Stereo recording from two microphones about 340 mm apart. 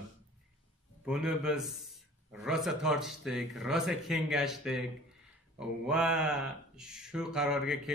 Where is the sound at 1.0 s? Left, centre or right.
Centre.